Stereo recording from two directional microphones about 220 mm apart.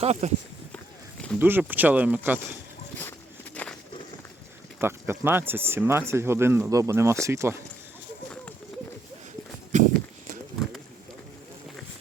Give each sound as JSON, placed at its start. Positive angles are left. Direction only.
{"t": 0.0, "sound": "speech", "side_deg": -30}
{"t": 1.4, "sound": "speech", "side_deg": -10}
{"t": 3.0, "sound": "walk", "side_deg": 5}
{"t": 4.8, "sound": "speech", "side_deg": -10}
{"t": 9.7, "sound": "walk", "side_deg": -35}